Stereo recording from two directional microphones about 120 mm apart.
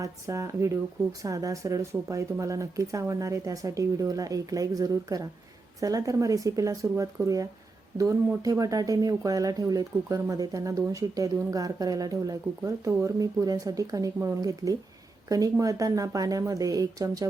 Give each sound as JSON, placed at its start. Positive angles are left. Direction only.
{"t": 0.0, "sound": "speech", "side_deg": -25}